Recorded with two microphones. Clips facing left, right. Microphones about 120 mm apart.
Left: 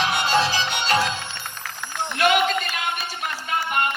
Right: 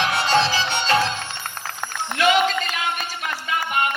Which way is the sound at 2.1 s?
50° left (ahead or behind).